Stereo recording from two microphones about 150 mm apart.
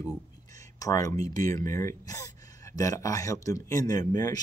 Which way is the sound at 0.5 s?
25° left (ahead or behind).